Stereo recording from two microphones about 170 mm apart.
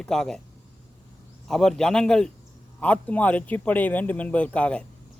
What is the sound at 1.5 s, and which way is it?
Speech, centre (ahead or behind).